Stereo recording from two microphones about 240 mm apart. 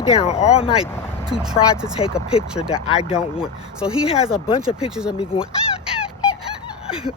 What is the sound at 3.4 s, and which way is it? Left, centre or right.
Speech, centre.